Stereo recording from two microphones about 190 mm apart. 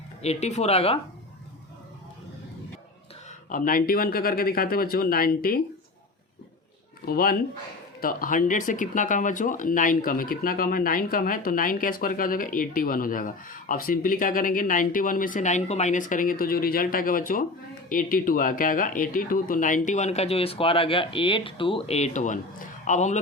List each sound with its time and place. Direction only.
0.2 s speech: 35° left (ahead or behind)
3.5 s speech: 45° left (ahead or behind)
7.0 s speech: 50° left (ahead or behind)